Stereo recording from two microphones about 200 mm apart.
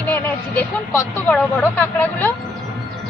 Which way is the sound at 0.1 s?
10° left (ahead or behind).